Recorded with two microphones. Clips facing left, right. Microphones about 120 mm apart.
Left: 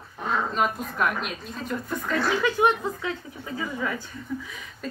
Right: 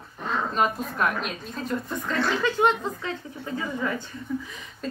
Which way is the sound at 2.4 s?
15° left (ahead or behind).